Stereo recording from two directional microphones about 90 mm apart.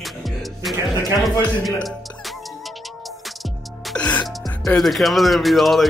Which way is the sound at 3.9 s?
15° left (ahead or behind).